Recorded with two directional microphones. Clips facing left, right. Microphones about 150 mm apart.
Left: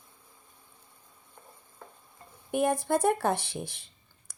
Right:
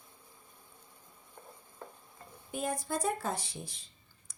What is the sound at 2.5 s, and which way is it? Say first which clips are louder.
Speech: left 9 dB; 65° left (ahead or behind).